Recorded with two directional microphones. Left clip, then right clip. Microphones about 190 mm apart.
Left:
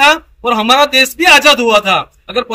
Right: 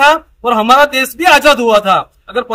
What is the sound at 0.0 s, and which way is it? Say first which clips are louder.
Speech: even; 5° right (ahead or behind).